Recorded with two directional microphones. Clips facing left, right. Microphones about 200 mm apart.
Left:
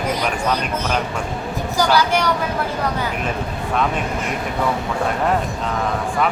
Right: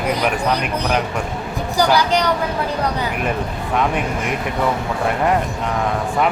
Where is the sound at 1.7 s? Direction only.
15° right (ahead or behind).